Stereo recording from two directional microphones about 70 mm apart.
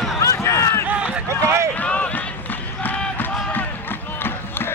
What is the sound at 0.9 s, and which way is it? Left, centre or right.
Run, centre.